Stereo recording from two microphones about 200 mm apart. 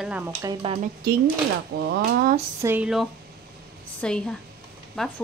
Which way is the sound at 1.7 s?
55° right (ahead or behind).